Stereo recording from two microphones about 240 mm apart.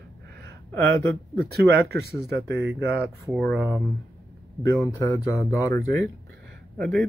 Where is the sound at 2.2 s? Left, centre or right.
Right.